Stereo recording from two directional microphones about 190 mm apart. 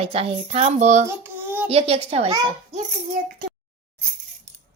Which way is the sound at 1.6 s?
30° right (ahead or behind).